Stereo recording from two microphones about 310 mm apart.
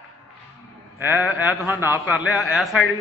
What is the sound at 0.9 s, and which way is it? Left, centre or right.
A man's voice, centre.